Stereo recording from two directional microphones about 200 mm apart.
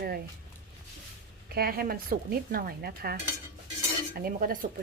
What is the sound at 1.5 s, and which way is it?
Dishes, 50° right (ahead or behind).